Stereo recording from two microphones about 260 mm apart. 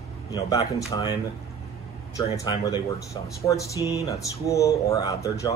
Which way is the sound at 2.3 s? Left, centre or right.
Centre.